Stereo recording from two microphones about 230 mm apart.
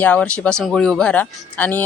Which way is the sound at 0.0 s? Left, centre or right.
Centre.